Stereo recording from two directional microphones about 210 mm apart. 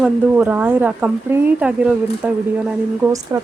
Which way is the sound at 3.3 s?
15° right (ahead or behind).